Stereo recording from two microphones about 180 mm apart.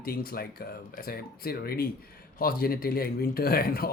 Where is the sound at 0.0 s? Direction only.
55° left (ahead or behind).